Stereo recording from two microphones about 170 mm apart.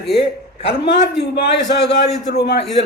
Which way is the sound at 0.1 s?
35° left (ahead or behind).